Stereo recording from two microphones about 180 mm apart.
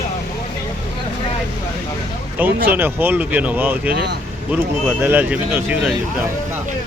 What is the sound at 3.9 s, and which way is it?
Speech, 70° right (ahead or behind).